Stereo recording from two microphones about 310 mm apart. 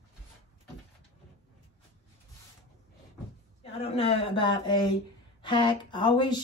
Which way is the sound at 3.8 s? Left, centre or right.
Centre.